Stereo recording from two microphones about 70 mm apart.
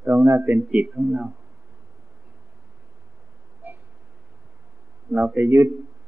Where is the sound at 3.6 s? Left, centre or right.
Right.